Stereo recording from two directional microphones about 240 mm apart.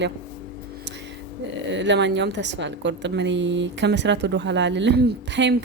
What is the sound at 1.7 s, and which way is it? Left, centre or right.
A woman's voice, right.